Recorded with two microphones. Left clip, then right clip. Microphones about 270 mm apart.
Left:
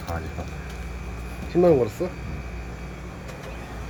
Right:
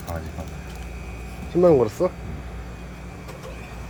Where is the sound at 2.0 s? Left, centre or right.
Centre.